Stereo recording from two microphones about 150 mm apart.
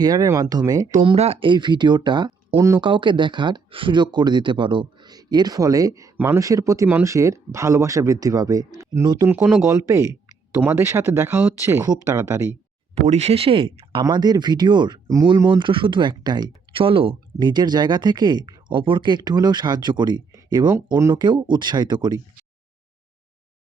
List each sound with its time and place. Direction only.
0.0 s speech: 25° right (ahead or behind)
1.0 s speech: 40° right (ahead or behind); by 9.3 s 20° right (ahead or behind)
9.3 s speech: 10° right (ahead or behind)
9.6 s speech: 20° right (ahead or behind)
12.9 s speech: 45° right (ahead or behind)
14.0 s speech: 25° right (ahead or behind)
15.5 s speech: 35° right (ahead or behind)